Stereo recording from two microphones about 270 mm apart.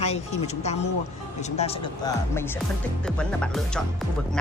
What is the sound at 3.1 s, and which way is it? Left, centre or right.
Speech, centre.